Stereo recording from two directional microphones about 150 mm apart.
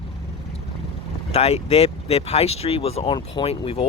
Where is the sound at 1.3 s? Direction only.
45° left (ahead or behind).